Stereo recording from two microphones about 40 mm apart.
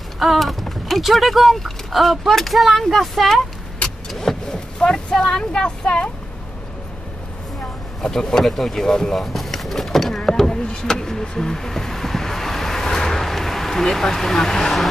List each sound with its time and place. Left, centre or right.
0.2 s speech: centre
4.2 s vehicle: centre
4.8 s speech: centre
8.0 s speech: centre
8.8 s speech: centre
9.1 s a sound: centre
12.8 s vehicle: centre